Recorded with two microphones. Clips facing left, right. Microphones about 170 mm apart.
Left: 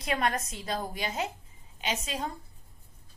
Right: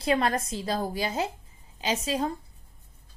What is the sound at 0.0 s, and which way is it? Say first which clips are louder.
A woman's voice: right 5 dB; 30° right (ahead or behind).